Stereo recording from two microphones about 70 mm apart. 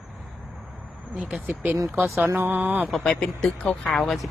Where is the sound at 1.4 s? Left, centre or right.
Right.